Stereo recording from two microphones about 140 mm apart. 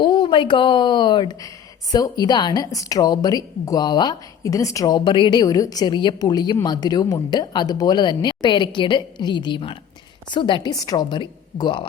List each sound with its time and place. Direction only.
0.0 s a woman's voice: 35° left (ahead or behind)